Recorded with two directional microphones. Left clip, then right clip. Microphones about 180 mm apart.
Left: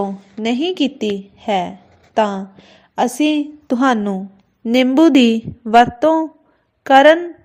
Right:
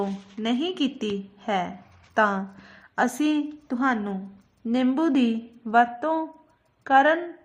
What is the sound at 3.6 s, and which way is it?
A woman's voice, 50° left (ahead or behind).